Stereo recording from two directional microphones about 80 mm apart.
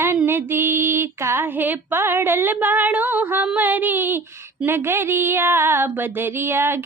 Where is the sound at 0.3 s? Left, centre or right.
Right.